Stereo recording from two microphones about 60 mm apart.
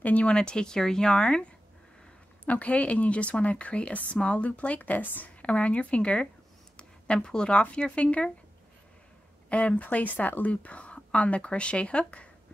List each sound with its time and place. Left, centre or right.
0.0 s speech: left
9.5 s speech: left